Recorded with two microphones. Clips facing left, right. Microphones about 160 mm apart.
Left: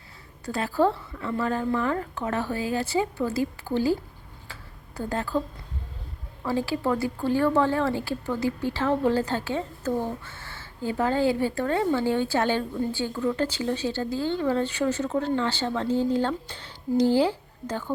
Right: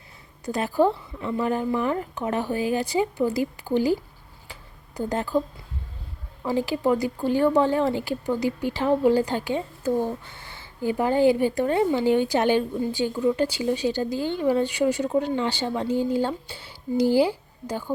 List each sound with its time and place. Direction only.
0.4 s speech: 15° right (ahead or behind)
4.9 s speech: 15° right (ahead or behind)
6.4 s speech: 15° right (ahead or behind)